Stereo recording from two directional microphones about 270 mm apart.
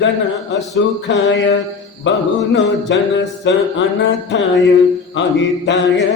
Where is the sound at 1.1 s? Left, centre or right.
Left.